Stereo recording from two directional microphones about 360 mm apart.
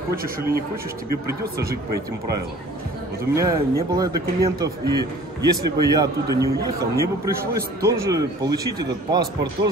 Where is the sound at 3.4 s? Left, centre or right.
Centre.